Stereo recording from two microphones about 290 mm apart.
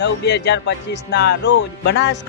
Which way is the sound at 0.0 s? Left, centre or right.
Left.